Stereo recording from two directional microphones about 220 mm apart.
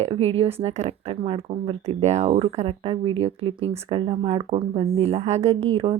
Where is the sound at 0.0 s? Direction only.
25° right (ahead or behind).